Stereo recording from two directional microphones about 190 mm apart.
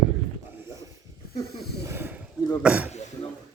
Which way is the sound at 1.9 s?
10° right (ahead or behind).